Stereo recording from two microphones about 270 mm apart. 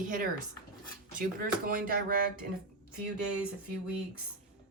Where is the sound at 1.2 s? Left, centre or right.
Right.